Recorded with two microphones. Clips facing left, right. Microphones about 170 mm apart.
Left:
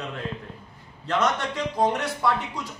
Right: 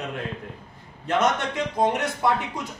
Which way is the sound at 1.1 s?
20° right (ahead or behind).